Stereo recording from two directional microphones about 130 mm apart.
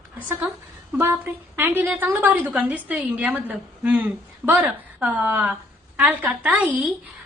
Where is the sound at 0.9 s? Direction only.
15° right (ahead or behind).